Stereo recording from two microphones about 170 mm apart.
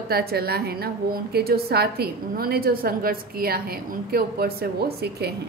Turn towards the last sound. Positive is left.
turn(degrees=-70)  # may be behind; listen again after turning